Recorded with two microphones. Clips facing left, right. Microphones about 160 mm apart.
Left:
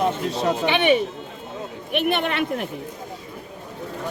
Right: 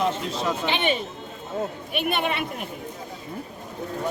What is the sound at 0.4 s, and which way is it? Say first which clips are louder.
Speech: left 6 dB; 60° left (ahead or behind).